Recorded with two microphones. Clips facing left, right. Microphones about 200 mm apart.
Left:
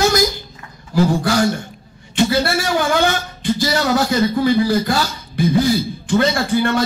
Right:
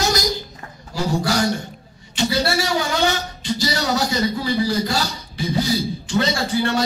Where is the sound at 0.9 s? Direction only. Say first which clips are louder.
Left 9 dB; 55° left (ahead or behind).